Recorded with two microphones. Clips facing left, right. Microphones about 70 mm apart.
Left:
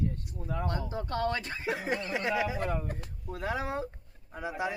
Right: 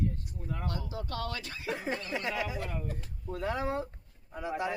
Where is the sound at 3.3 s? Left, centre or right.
Centre.